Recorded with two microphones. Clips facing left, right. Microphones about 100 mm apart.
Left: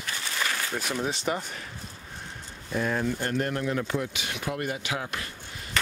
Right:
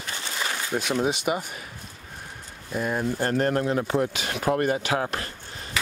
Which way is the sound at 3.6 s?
30° right (ahead or behind).